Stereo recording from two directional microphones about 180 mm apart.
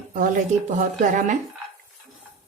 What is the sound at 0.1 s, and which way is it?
A woman's voice, 45° right (ahead or behind).